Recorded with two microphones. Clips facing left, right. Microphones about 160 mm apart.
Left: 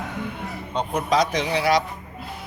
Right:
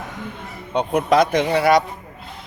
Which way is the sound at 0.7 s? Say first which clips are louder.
Right 5 dB; 60° right (ahead or behind).